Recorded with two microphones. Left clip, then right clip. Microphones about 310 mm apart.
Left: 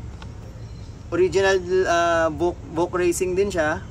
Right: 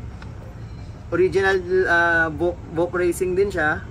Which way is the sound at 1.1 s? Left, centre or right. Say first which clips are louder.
Even; centre.